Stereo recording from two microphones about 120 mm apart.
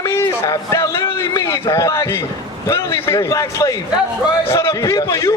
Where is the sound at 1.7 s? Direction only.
25° left (ahead or behind).